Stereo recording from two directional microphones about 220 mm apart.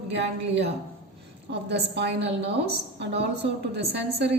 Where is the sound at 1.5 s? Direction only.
50° right (ahead or behind).